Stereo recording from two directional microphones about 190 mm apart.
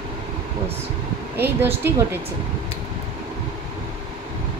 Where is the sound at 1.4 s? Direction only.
10° right (ahead or behind).